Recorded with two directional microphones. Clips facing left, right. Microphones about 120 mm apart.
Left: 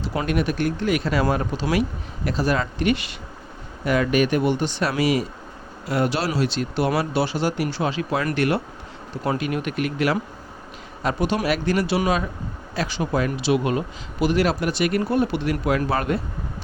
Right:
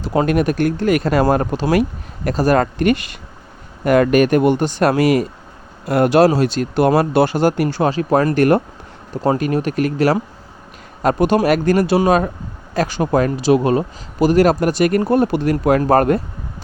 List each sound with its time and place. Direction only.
0.3 s speech: 50° right (ahead or behind)